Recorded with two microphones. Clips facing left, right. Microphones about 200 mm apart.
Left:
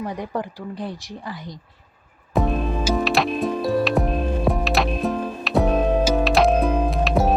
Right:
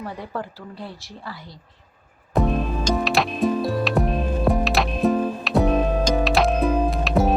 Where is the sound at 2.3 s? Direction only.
Centre (ahead or behind).